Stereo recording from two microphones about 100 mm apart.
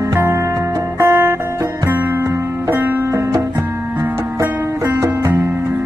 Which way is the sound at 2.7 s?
25° right (ahead or behind).